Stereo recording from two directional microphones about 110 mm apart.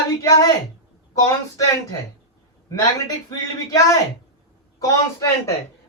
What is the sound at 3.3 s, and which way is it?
Speech, 35° left (ahead or behind).